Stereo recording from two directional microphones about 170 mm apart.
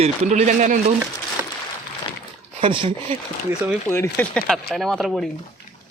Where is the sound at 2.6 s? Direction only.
35° right (ahead or behind).